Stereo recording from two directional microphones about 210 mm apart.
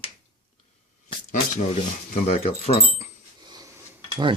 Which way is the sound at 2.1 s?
30° left (ahead or behind).